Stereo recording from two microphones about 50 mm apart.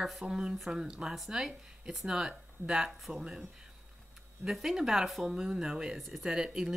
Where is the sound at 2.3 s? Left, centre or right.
Centre.